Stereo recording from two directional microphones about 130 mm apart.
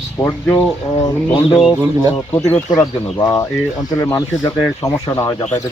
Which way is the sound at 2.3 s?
20° left (ahead or behind).